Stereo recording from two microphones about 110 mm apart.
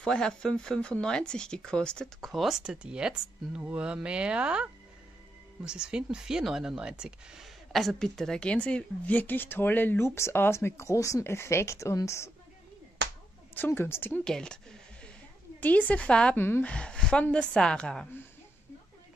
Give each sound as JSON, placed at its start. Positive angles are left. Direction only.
{"t": 0.0, "sound": "speech", "side_deg": 5}
{"t": 13.6, "sound": "a woman's voice", "side_deg": 20}
{"t": 14.2, "sound": "speech", "side_deg": 5}
{"t": 16.4, "sound": "a woman's voice", "side_deg": 20}
{"t": 16.7, "sound": "speech", "side_deg": 10}